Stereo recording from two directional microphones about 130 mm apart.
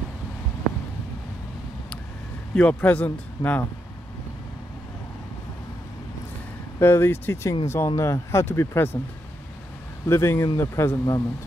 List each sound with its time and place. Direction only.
2.5 s speech: 10° left (ahead or behind)
6.8 s speech: 20° left (ahead or behind)
10.0 s speech: 20° left (ahead or behind)